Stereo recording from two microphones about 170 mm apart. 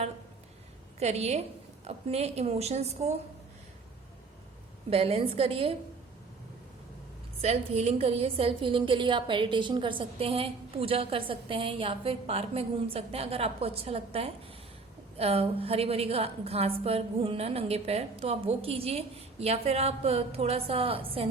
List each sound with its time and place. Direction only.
0.9 s a woman's voice: 40° right (ahead or behind)
4.9 s a woman's voice: 35° right (ahead or behind)
7.4 s a woman's voice: 35° right (ahead or behind)